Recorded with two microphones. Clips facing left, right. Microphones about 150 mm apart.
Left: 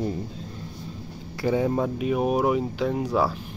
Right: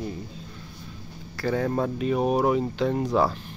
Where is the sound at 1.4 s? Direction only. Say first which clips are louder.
Left 2 dB; 15° left (ahead or behind).